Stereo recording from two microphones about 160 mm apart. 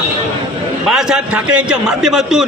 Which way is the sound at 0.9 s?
5° right (ahead or behind).